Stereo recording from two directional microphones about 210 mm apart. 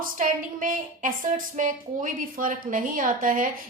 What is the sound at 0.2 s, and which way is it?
A woman's voice, 40° right (ahead or behind).